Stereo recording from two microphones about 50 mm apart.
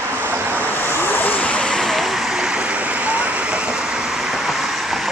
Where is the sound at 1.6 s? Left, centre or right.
Centre.